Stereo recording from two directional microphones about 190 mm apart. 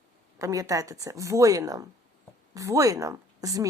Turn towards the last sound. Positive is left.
turn(degrees=-15)  # may be behind; listen again after turning